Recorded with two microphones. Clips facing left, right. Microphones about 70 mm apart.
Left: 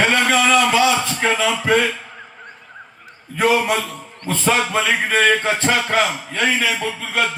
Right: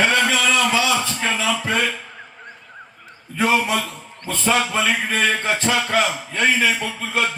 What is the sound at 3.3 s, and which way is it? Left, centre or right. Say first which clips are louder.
Speech: left 2 dB; left.